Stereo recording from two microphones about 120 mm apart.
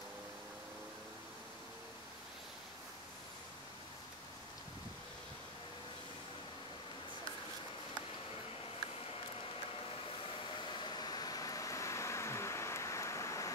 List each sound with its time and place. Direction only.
10.8 s vehicle: 40° left (ahead or behind)